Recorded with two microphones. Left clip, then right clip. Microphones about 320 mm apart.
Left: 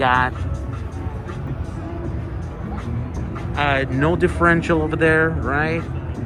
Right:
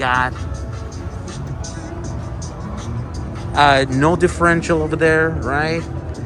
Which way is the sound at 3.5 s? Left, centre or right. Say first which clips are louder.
Right 7 dB; centre.